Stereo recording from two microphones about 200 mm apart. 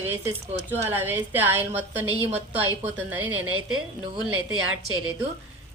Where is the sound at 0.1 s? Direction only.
10° right (ahead or behind).